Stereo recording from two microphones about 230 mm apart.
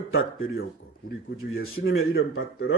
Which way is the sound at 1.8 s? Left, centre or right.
Left.